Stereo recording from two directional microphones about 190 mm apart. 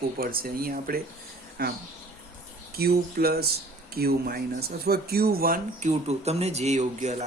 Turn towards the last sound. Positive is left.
turn(degrees=-35)  # may be behind; listen again after turning